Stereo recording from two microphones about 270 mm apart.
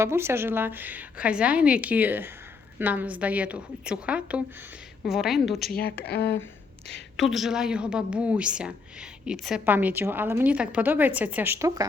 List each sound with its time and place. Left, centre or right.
0.0 s a woman's voice: centre
5.7 s speech: left
7.2 s a woman's voice: centre